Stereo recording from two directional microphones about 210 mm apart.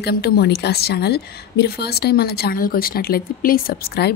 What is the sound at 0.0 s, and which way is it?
A woman's voice, 45° left (ahead or behind).